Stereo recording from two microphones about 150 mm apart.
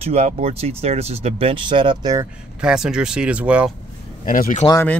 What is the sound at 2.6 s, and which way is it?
Speech, 5° right (ahead or behind).